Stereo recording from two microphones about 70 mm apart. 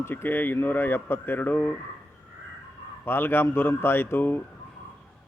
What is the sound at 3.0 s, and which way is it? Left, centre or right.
Speech, left.